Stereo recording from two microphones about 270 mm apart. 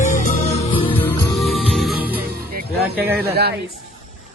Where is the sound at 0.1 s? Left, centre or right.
Left.